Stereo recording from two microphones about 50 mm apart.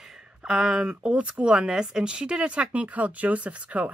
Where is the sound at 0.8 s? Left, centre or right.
Right.